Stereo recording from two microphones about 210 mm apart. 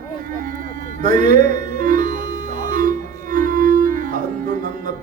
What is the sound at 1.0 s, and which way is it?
Music, 35° right (ahead or behind).